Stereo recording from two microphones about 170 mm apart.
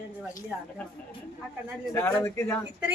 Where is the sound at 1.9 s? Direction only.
15° left (ahead or behind).